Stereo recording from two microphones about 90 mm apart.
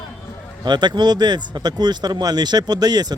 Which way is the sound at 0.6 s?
55° right (ahead or behind).